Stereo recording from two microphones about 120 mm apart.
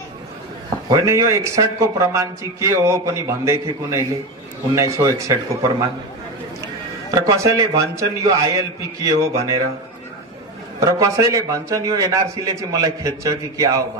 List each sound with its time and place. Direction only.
0.8 s a man's voice: 25° right (ahead or behind)
7.2 s a man's voice: 25° right (ahead or behind)
10.8 s a man's voice: 25° right (ahead or behind)